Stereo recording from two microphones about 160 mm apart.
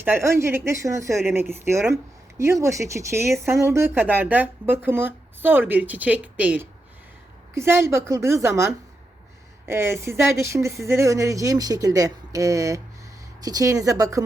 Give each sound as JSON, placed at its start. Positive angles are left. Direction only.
{"t": 0.0, "sound": "speech", "side_deg": -15}